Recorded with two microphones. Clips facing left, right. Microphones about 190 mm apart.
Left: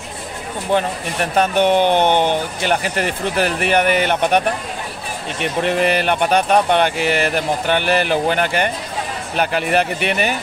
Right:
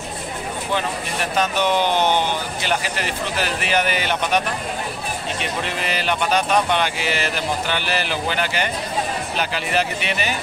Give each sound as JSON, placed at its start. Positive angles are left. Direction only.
{"t": 1.3, "sound": "speech", "side_deg": 60}
{"t": 5.4, "sound": "speech", "side_deg": 55}